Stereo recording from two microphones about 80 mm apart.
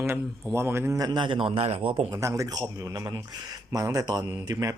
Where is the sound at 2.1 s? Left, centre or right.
Right.